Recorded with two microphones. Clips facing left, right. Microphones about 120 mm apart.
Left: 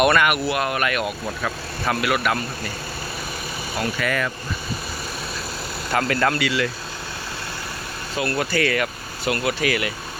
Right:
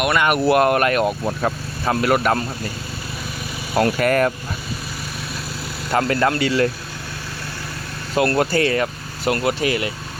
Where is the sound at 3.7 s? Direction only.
50° right (ahead or behind).